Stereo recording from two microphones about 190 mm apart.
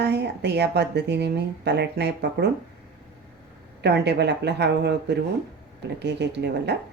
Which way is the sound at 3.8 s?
60° right (ahead or behind).